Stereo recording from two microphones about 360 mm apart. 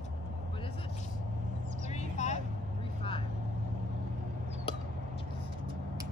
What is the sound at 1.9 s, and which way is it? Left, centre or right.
Vehicle, centre.